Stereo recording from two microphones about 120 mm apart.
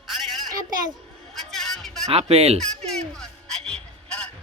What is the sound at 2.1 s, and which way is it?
Speech, 60° right (ahead or behind).